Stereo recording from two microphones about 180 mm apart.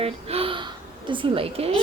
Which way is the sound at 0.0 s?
30° right (ahead or behind).